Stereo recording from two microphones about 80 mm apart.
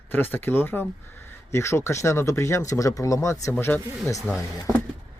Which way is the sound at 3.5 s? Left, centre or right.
Left.